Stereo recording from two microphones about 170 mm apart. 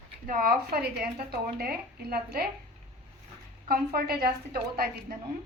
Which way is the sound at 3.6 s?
60° right (ahead or behind).